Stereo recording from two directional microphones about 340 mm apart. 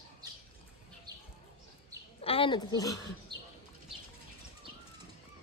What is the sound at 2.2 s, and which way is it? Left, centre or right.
Speech, centre.